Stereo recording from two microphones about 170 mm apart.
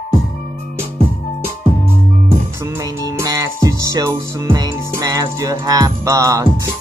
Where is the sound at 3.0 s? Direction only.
20° right (ahead or behind).